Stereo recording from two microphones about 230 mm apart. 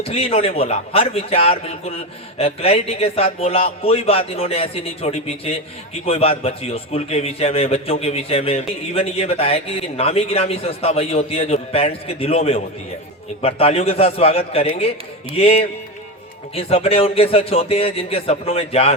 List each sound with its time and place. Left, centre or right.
0.1 s a man's voice: left